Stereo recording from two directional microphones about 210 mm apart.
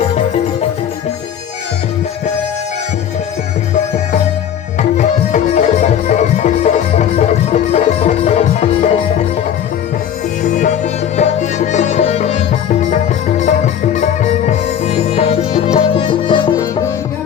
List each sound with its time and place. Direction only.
4.8 s music: 35° left (ahead or behind)
10.4 s music: 40° left (ahead or behind); by 16.6 s 20° left (ahead or behind)